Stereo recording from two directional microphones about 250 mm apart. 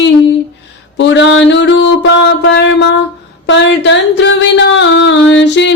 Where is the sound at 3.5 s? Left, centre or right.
Left.